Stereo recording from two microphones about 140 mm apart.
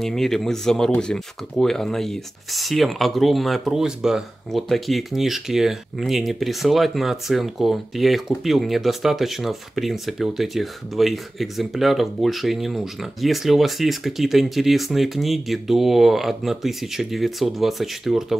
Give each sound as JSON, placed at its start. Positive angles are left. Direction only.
{"t": 0.0, "sound": "speech", "side_deg": 5}